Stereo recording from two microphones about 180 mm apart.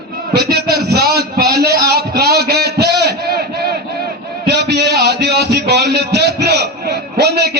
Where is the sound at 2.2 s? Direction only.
65° right (ahead or behind).